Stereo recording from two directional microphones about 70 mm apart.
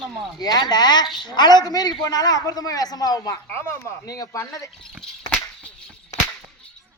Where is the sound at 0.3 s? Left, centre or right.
Left.